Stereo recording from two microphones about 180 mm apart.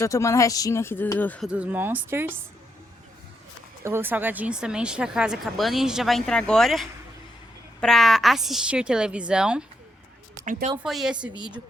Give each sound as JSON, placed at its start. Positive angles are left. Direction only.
{"t": 0.0, "sound": "speech", "side_deg": 15}
{"t": 1.5, "sound": "speech", "side_deg": -5}
{"t": 3.8, "sound": "speech", "side_deg": -10}
{"t": 10.4, "sound": "speech", "side_deg": -45}
{"t": 10.8, "sound": "speech", "side_deg": 0}